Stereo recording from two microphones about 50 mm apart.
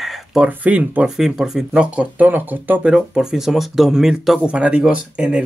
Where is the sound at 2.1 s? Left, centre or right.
Right.